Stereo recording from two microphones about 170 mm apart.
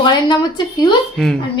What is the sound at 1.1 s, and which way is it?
Speech, centre (ahead or behind).